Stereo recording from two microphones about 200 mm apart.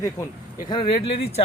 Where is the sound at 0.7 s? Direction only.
25° left (ahead or behind).